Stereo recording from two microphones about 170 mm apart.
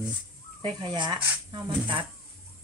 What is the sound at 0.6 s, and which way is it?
Speech, 25° right (ahead or behind).